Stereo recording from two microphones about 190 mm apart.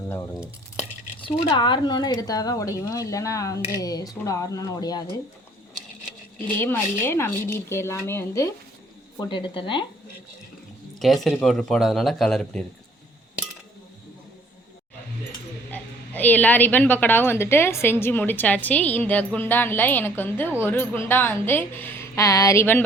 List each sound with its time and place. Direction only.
1.2 s a woman's voice: 25° left (ahead or behind)
6.6 s speech: 10° left (ahead or behind)
9.1 s a woman's voice: 25° left (ahead or behind)
11.0 s speech: centre (ahead or behind)
15.7 s speech: 10° left (ahead or behind)